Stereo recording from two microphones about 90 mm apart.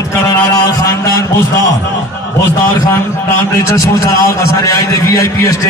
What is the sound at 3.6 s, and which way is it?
A man's voice, 35° left (ahead or behind).